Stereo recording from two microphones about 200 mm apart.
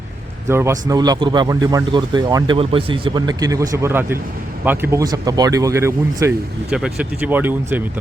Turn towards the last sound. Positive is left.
turn(degrees=-10)  # may be behind; listen again after turning